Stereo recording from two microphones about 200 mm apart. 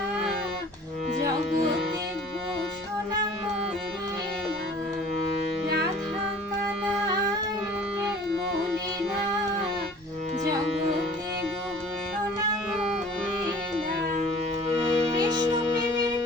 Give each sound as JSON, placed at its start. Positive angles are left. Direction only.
{"t": 14.8, "sound": "music", "side_deg": -20}